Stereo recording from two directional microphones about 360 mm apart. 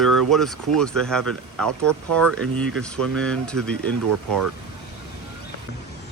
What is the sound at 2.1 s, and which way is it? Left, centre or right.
Speech, right.